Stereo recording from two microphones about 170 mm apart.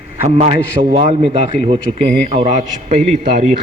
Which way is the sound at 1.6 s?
45° right (ahead or behind).